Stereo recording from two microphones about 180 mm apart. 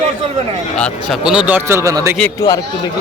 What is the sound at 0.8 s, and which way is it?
A man's voice, centre (ahead or behind).